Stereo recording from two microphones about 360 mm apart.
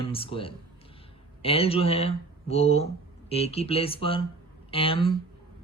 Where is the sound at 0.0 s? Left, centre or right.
Centre.